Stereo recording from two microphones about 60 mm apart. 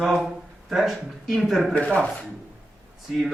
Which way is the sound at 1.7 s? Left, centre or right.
Centre.